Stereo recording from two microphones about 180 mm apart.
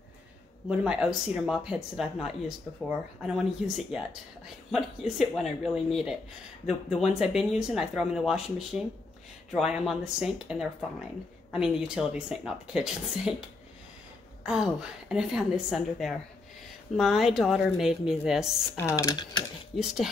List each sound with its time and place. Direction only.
0.7 s speech: 5° right (ahead or behind)
14.4 s speech: 5° right (ahead or behind)
18.8 s speech: 15° left (ahead or behind)
19.8 s speech: centre (ahead or behind)